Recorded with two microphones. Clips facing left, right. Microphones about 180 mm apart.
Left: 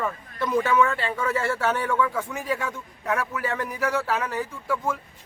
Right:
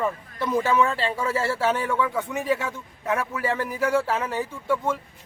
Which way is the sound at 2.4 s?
25° right (ahead or behind).